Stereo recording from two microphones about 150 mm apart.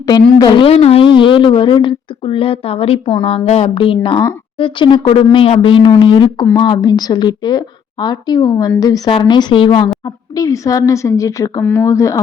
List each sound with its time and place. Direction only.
0.1 s a woman's voice: 30° left (ahead or behind)
10.3 s a woman's voice: 20° left (ahead or behind)